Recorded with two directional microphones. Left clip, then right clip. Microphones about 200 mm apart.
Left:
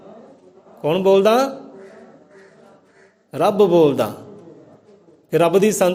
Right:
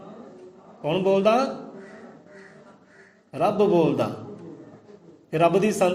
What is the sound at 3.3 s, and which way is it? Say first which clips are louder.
Speech: left 6 dB; 50° left (ahead or behind).